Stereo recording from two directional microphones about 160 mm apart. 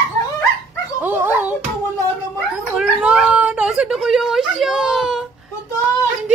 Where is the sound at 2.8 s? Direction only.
5° right (ahead or behind).